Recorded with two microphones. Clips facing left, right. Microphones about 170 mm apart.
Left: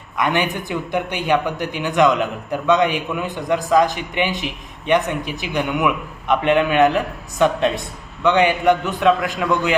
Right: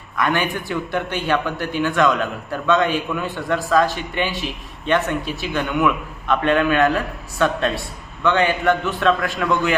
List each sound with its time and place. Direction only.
0.2 s a man's voice: 20° left (ahead or behind)